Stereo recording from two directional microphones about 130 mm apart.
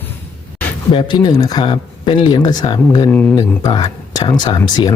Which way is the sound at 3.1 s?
15° left (ahead or behind).